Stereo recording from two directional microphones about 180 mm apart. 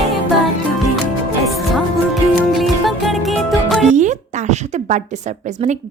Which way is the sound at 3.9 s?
40° right (ahead or behind).